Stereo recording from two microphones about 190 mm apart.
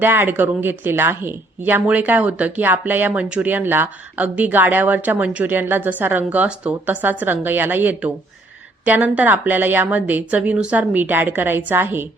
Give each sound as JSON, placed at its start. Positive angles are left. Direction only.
{"t": 0.0, "sound": "a woman's voice", "side_deg": -10}